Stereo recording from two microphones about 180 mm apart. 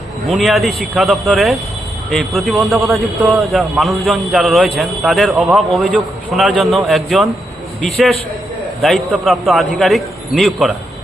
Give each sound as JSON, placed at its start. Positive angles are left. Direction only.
{"t": 0.3, "sound": "a man's voice", "side_deg": 0}
{"t": 2.8, "sound": "a man's voice", "side_deg": -15}
{"t": 3.4, "sound": "a man's voice", "side_deg": 0}